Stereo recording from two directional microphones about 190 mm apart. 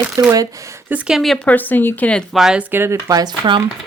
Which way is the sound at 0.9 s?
5° right (ahead or behind).